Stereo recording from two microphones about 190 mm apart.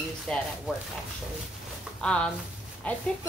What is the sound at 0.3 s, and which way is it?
Speech, 5° left (ahead or behind).